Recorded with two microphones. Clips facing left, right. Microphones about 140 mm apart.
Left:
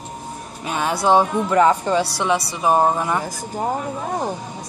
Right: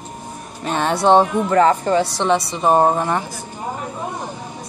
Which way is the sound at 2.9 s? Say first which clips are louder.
Right 2 dB; 25° right (ahead or behind).